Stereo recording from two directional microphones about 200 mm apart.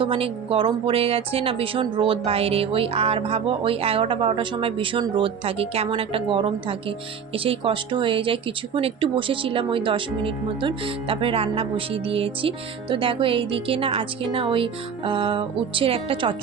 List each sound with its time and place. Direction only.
0.0 s speech: 25° right (ahead or behind)